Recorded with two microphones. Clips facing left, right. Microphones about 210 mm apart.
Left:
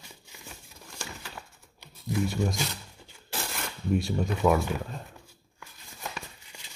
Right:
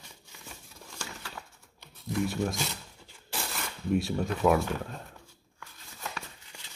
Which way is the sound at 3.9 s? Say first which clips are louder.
Left 1 dB; centre (ahead or behind).